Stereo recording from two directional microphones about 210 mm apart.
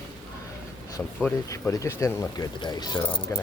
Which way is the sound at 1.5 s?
15° left (ahead or behind).